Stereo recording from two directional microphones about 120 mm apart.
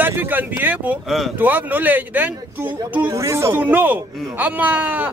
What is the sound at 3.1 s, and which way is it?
A man's voice, 25° right (ahead or behind).